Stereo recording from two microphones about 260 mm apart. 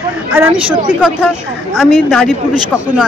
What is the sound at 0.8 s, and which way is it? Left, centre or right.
Speech, centre.